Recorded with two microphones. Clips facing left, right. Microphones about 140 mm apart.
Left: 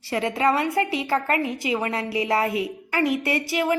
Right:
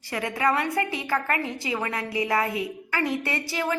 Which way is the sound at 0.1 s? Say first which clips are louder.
Left 3 dB; 25° left (ahead or behind).